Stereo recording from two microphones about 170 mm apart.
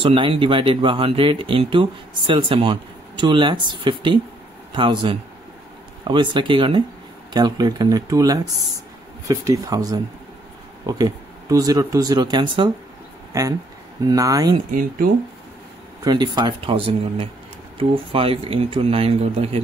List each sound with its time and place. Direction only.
0.0 s speech: 30° right (ahead or behind)
14.7 s speech: 55° right (ahead or behind)
16.0 s speech: 25° right (ahead or behind)